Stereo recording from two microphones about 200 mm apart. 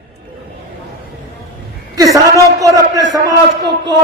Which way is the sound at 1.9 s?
15° right (ahead or behind).